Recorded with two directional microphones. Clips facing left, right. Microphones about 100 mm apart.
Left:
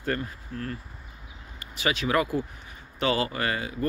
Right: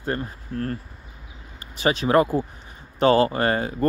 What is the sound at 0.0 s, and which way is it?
Speech, 25° right (ahead or behind).